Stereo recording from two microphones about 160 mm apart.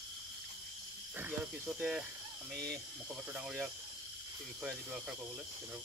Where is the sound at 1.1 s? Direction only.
10° right (ahead or behind).